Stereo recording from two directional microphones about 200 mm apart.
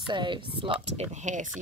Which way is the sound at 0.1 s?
25° right (ahead or behind).